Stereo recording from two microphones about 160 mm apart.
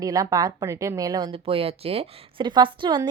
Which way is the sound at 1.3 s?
35° right (ahead or behind).